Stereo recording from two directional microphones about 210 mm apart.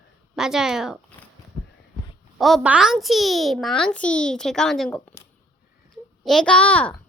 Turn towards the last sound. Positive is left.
turn(degrees=5)  # may be behind; listen again after turning